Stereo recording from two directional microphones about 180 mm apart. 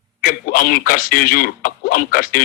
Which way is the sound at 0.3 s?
55° left (ahead or behind).